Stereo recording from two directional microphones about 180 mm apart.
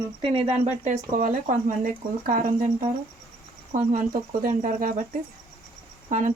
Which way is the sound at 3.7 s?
50° right (ahead or behind).